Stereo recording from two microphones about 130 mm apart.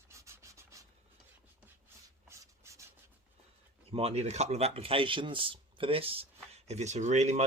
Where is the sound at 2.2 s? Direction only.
20° right (ahead or behind).